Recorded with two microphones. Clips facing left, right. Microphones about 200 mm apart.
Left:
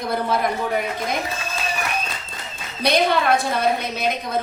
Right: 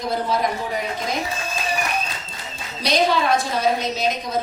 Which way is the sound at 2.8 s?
55° left (ahead or behind).